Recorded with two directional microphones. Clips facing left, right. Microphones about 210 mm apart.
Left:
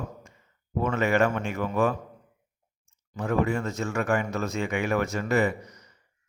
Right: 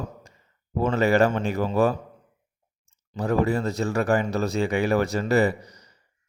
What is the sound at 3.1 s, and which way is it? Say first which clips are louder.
Speech: right 3 dB; 35° right (ahead or behind).